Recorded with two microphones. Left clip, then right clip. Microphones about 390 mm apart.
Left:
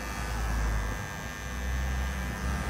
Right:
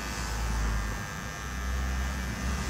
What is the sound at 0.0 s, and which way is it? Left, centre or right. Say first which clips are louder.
Electric shaver: even; centre.